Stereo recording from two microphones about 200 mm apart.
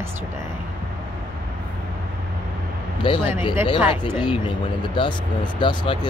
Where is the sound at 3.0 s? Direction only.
25° left (ahead or behind).